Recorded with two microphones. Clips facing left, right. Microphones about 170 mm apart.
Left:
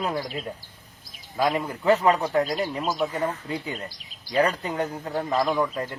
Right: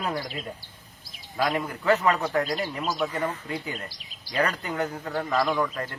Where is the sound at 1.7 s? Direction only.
30° left (ahead or behind).